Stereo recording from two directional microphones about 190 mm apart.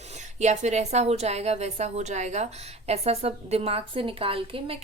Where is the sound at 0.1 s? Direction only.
35° right (ahead or behind).